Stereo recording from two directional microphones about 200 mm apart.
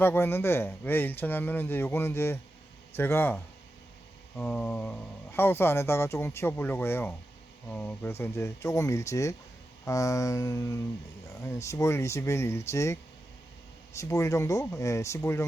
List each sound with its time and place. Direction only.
0.0 s speech: 10° left (ahead or behind)